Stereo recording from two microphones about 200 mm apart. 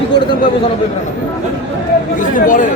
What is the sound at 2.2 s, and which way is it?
Speech, 40° left (ahead or behind).